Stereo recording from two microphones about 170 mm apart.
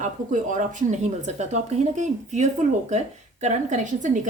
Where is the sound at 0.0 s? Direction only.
50° right (ahead or behind).